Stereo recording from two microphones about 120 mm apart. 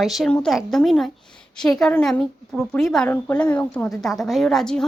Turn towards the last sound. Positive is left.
turn(degrees=5)  # may be behind; listen again after turning